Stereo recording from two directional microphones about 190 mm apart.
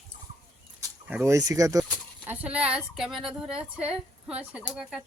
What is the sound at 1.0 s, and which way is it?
Speech, 10° right (ahead or behind).